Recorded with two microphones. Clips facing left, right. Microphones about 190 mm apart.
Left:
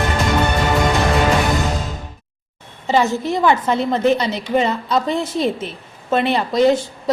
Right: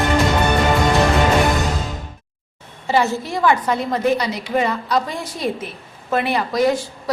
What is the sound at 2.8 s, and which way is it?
A woman's voice, 20° left (ahead or behind).